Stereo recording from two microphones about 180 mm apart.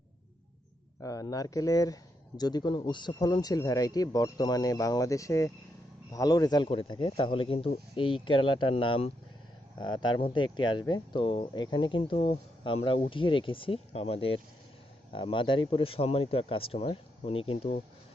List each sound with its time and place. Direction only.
1.0 s speech: 20° left (ahead or behind)